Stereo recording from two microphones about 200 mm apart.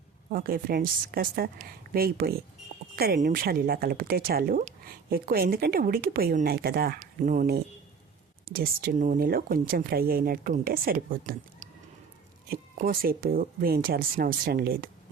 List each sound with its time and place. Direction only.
0.3 s speech: 45° right (ahead or behind)